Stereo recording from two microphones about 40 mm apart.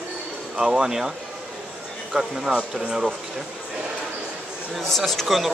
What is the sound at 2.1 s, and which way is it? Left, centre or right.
Speech, centre.